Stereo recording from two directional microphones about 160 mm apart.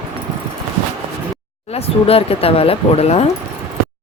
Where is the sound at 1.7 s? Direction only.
40° left (ahead or behind).